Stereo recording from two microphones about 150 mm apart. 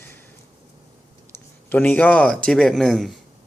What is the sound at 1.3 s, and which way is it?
Speech, 10° left (ahead or behind).